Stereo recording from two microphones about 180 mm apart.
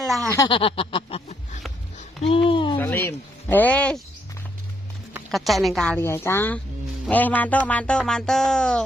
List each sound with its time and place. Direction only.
0.3 s a sound: 20° left (ahead or behind)
2.7 s speech: 10° left (ahead or behind)
5.3 s speech: centre (ahead or behind)